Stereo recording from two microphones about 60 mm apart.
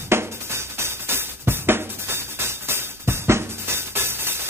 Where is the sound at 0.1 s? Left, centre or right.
Right.